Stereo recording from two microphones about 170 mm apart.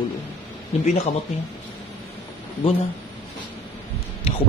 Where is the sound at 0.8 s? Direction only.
40° left (ahead or behind).